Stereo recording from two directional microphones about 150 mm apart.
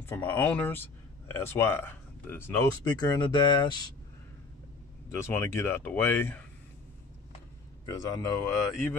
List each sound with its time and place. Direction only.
0.0 s speech: 15° left (ahead or behind)
5.2 s speech: 15° left (ahead or behind)
7.8 s speech: 25° left (ahead or behind)